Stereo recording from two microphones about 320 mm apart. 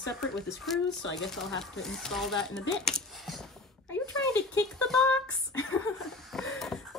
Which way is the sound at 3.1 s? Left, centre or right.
Centre.